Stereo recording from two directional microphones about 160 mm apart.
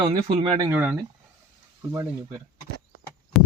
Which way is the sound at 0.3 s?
40° right (ahead or behind).